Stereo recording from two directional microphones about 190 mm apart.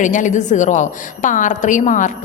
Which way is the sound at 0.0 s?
40° left (ahead or behind).